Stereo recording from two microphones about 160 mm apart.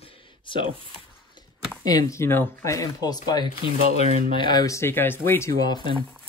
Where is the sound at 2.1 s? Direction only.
15° left (ahead or behind).